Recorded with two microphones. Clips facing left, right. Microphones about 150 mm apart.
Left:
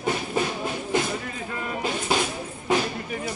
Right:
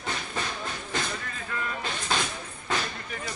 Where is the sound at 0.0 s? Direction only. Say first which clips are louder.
Left 8 dB; 15° left (ahead or behind).